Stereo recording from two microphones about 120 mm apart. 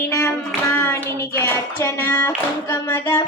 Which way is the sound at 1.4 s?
20° left (ahead or behind).